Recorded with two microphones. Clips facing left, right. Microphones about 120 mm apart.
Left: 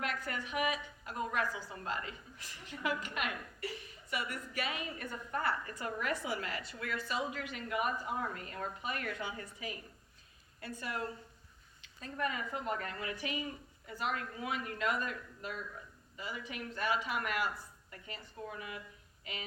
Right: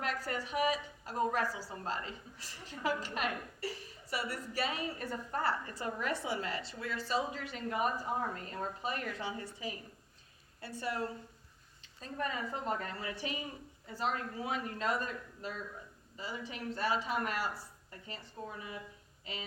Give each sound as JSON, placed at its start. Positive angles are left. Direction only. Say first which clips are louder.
{"t": 0.0, "sound": "a woman's voice", "louder": "right 2 dB", "side_deg": -35}
{"t": 19.3, "sound": "a woman's voice", "louder": "right 1 dB", "side_deg": -30}